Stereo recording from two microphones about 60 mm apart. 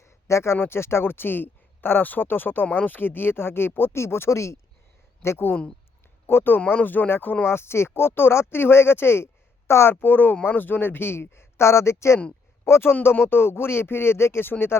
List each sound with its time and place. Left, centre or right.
0.0 s speech: left
6.2 s speech: left
7.4 s speech: left
9.9 s speech: left